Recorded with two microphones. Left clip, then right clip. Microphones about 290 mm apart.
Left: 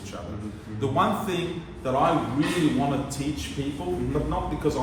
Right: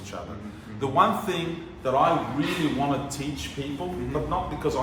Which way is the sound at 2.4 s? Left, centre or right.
Centre.